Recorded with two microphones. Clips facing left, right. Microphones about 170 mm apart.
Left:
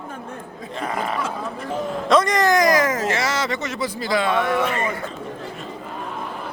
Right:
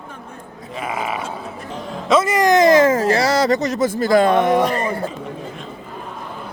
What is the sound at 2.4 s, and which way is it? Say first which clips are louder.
Speech: right 5 dB; 25° right (ahead or behind).